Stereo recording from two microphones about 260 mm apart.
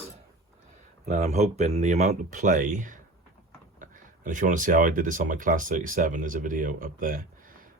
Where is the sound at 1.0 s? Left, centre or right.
Right.